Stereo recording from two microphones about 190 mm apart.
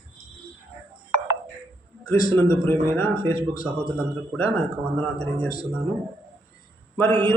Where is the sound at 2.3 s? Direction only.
10° left (ahead or behind).